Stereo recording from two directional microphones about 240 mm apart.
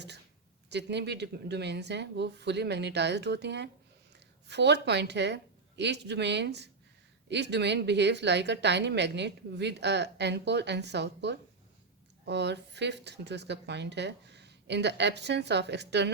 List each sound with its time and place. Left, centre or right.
0.7 s a woman's voice: right